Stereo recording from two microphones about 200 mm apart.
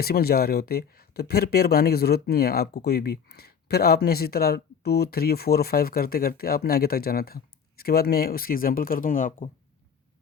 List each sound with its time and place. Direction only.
0.0 s speech: 50° left (ahead or behind)